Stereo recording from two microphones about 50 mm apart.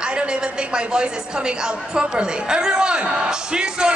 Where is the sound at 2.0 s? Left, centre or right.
Centre.